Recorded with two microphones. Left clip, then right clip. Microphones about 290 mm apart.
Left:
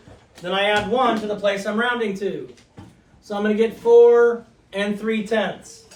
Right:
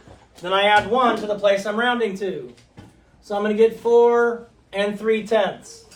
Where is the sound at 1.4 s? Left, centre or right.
Centre.